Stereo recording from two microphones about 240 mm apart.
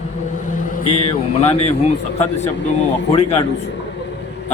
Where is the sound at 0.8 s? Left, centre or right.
Left.